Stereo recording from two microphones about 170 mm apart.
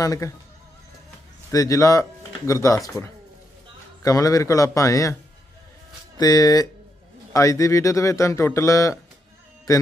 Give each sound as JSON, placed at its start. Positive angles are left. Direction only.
{"t": 0.0, "sound": "a man's voice", "side_deg": 20}
{"t": 1.5, "sound": "a man's voice", "side_deg": 20}
{"t": 6.1, "sound": "a man's voice", "side_deg": 20}